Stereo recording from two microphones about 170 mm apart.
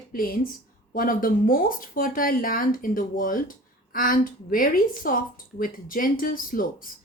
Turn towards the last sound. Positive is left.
turn(degrees=55)  # may be behind; listen again after turning